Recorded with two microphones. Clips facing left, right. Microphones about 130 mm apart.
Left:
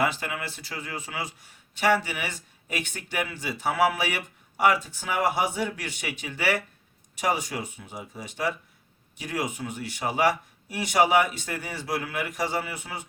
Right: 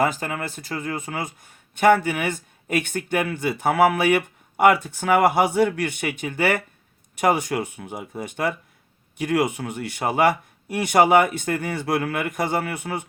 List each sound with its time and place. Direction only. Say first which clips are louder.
0.0 s speech: right 4 dB; 45° right (ahead or behind); by 13.1 s 60° right (ahead or behind)